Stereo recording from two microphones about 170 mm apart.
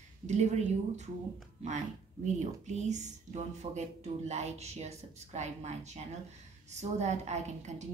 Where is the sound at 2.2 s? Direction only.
45° right (ahead or behind).